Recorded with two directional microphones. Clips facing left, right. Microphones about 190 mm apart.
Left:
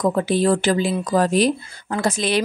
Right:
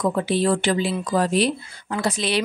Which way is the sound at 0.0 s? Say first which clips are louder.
Left 2 dB; 45° left (ahead or behind).